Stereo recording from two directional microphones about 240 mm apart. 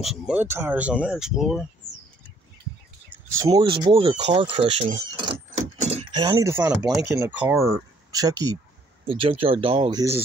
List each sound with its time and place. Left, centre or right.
0.0 s speech: centre
3.1 s speech: centre